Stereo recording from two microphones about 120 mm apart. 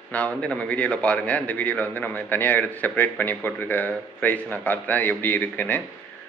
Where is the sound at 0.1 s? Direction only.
10° left (ahead or behind).